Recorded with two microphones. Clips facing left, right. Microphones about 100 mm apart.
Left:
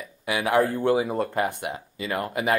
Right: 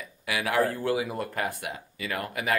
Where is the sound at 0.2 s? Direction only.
30° left (ahead or behind).